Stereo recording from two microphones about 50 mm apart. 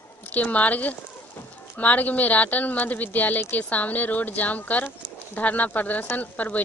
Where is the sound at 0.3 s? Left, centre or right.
Left.